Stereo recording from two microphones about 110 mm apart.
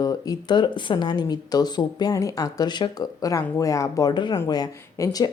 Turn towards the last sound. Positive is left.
turn(degrees=30)  # may be behind; listen again after turning